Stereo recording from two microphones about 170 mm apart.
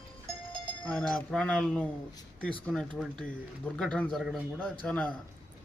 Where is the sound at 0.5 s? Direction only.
5° left (ahead or behind).